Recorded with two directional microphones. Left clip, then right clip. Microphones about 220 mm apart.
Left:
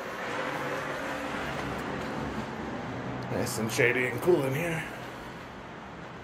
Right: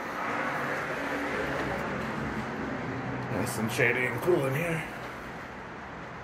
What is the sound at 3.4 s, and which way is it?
Speech, 15° left (ahead or behind).